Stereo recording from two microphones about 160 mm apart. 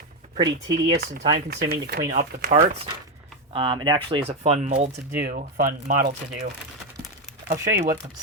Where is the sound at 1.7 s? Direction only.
85° right.